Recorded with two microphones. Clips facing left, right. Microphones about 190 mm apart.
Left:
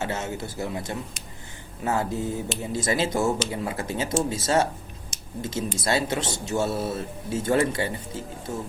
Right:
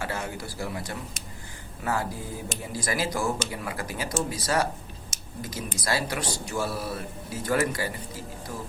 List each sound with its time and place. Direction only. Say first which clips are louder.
0.0 s a man's voice: left 3 dB; 25° left (ahead or behind)